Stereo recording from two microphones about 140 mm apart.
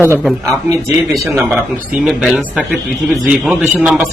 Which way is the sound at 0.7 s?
20° right (ahead or behind).